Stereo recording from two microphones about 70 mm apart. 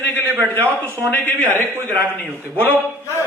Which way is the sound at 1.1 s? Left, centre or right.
Left.